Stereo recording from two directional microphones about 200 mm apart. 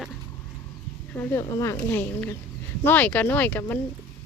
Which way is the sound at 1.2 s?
15° left (ahead or behind).